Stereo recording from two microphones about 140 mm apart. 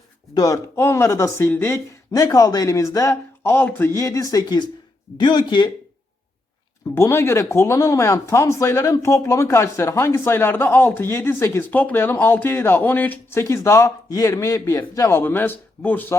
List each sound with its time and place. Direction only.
0.3 s speech: 25° left (ahead or behind)
6.8 s speech: 20° left (ahead or behind)